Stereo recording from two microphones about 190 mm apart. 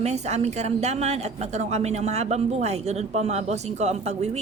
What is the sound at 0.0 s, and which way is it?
A woman's voice, 35° right (ahead or behind).